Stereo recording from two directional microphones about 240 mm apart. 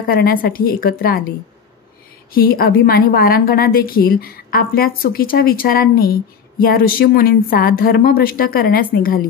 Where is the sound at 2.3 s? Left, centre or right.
Left.